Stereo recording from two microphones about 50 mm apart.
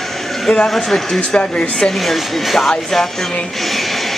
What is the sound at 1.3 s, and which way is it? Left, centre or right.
Speech, left.